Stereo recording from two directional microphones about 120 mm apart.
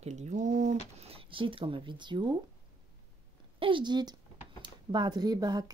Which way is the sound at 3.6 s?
40° right (ahead or behind).